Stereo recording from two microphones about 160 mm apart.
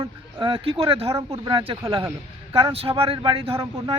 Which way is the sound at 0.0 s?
35° right (ahead or behind).